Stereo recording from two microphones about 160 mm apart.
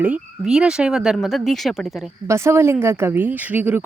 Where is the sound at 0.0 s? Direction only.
5° right (ahead or behind).